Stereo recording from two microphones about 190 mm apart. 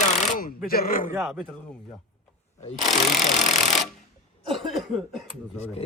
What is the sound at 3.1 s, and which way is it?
Speech, 40° left (ahead or behind).